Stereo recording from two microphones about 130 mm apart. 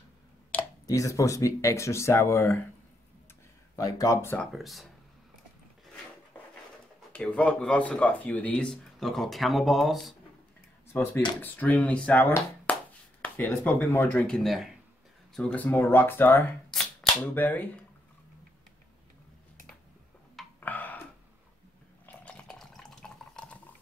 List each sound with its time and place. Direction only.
0.5 s a sound: 10° left (ahead or behind)
0.8 s speech: 25° left (ahead or behind)
3.7 s speech: 25° left (ahead or behind)
4.4 s speech: centre (ahead or behind)
7.1 s speech: 10° left (ahead or behind)
10.9 s speech: 20° left (ahead or behind); by 14.7 s centre (ahead or behind)
15.3 s speech: 10° left (ahead or behind)
20.6 s a sound: 15° left (ahead or behind)
22.0 s water: 10° left (ahead or behind)